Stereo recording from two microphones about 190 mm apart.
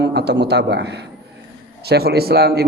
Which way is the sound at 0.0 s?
60° right (ahead or behind).